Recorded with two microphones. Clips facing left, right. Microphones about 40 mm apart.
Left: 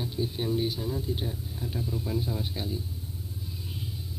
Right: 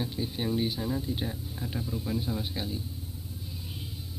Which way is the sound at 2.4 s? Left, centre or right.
Centre.